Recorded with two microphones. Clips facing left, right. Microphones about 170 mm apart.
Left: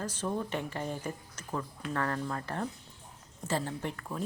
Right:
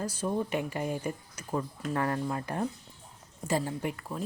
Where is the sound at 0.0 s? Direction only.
10° right (ahead or behind).